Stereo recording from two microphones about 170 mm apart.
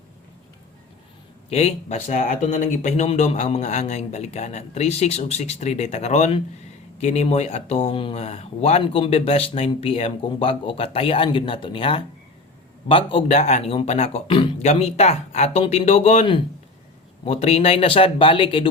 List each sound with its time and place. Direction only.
1.5 s speech: 40° left (ahead or behind)